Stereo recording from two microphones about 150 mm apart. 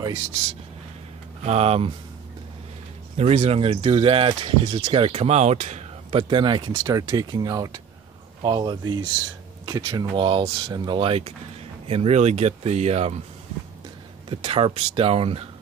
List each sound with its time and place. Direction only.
1.4 s speech: 45° right (ahead or behind)
3.2 s speech: 45° right (ahead or behind); by 10.0 s 20° right (ahead or behind)
10.1 s speech: 35° right (ahead or behind)
14.3 s speech: 40° right (ahead or behind)